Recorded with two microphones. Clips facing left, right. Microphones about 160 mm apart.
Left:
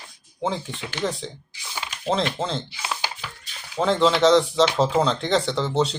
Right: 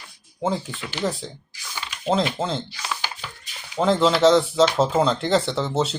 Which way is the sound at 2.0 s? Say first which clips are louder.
Right 2 dB; 5° right (ahead or behind).